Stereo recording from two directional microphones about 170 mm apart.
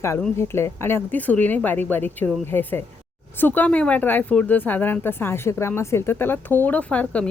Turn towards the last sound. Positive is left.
turn(degrees=5)  # may be behind; listen again after turning